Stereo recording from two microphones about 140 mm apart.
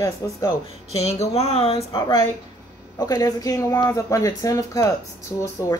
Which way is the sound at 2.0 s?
30° left (ahead or behind).